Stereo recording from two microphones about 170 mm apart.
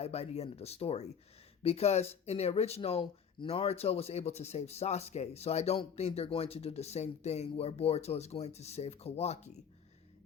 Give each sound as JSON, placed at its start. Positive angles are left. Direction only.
{"t": 0.0, "sound": "speech", "side_deg": 40}